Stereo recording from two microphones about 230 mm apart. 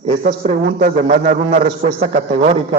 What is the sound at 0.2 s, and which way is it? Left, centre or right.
A man's voice, right.